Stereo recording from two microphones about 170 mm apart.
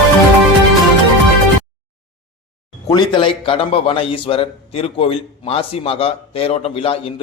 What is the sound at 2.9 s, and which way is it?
A man's voice, 25° left (ahead or behind).